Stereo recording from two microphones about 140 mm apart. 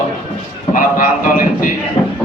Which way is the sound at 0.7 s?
75° left (ahead or behind).